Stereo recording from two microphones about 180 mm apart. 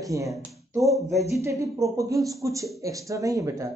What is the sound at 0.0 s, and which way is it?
Speech, 20° right (ahead or behind).